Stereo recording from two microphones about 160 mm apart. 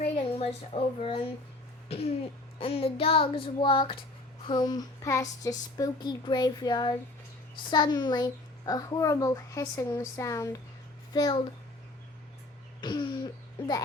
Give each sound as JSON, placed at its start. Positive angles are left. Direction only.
{"t": 0.0, "sound": "a child's voice", "side_deg": 40}
{"t": 2.6, "sound": "a sound", "side_deg": 35}
{"t": 4.4, "sound": "a child's voice", "side_deg": 25}
{"t": 12.8, "sound": "cough", "side_deg": 30}